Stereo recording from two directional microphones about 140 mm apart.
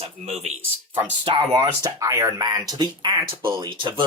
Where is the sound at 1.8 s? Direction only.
20° right (ahead or behind).